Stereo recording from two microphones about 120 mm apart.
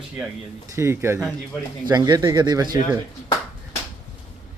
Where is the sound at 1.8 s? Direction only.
35° right (ahead or behind).